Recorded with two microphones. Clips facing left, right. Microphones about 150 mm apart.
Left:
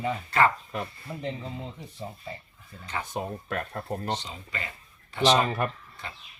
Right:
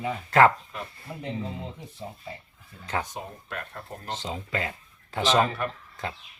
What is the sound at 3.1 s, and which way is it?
Speech, 50° left (ahead or behind).